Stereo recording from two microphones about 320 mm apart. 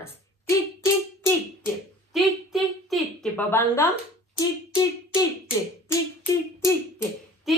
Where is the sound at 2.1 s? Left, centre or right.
Centre.